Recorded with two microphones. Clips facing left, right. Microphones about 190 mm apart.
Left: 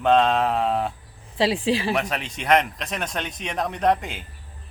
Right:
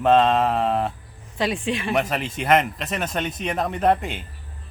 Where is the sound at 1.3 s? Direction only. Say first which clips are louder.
Left 3 dB; 30° left (ahead or behind).